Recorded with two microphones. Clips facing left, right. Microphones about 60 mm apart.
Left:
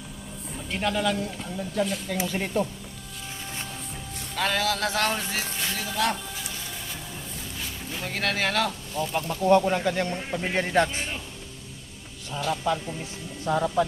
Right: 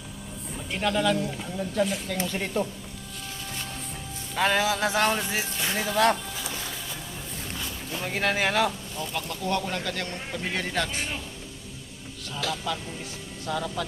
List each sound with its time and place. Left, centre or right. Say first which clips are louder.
0.7 s speech: right 1 dB; centre
4.4 s speech: right 2 dB; centre
8.0 s speech: right 2 dB; centre
9.0 s speech: left 10 dB; left
12.7 s speech: left 5 dB; left